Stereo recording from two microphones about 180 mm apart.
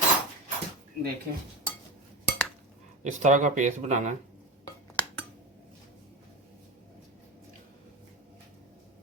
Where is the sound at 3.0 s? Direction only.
45° right (ahead or behind).